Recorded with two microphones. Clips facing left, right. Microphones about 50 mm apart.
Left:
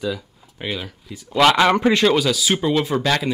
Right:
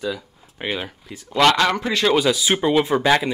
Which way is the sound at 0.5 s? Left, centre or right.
Right.